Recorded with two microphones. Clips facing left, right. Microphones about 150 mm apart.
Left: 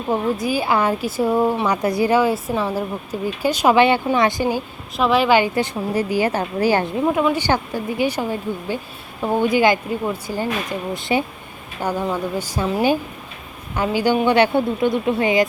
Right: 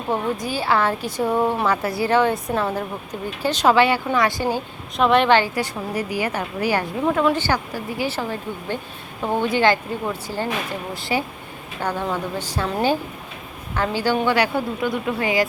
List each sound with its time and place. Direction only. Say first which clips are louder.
0.1 s speech: left 3 dB; 10° left (ahead or behind)
4.9 s a woman's voice: even; centre (ahead or behind)
5.4 s a woman's voice: left 4 dB; 20° left (ahead or behind)
7.3 s a woman's voice: left 3 dB; 20° left (ahead or behind)
11.8 s a woman's voice: left 2 dB; 10° left (ahead or behind)